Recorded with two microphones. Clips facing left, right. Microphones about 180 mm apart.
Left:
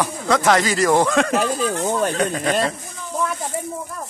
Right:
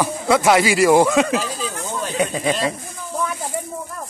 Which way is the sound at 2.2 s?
10° right (ahead or behind).